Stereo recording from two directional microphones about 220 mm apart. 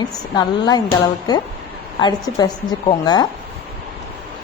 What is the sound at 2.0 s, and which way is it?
Speech, 20° left (ahead or behind).